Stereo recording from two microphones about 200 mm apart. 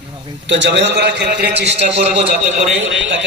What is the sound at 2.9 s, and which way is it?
Speech, 65° right (ahead or behind).